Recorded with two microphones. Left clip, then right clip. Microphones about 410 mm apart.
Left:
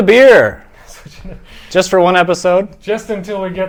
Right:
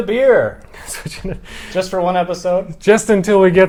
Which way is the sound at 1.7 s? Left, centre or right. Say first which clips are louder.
Left 6 dB; left.